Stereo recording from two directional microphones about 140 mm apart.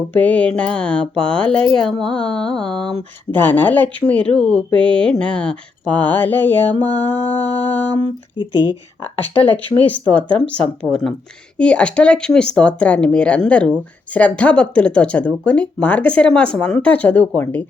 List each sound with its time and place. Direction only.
0.1 s speech: 10° left (ahead or behind)
8.0 s speech: 30° left (ahead or behind)
9.8 s speech: 10° left (ahead or behind)
11.5 s speech: 10° left (ahead or behind)